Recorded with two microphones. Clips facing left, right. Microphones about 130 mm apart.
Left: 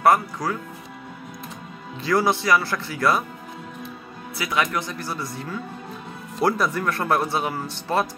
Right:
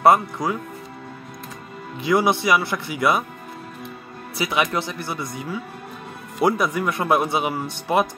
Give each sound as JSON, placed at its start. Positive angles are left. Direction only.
{"t": 0.0, "sound": "speech", "side_deg": -20}
{"t": 2.0, "sound": "speech", "side_deg": -20}
{"t": 4.4, "sound": "speech", "side_deg": -25}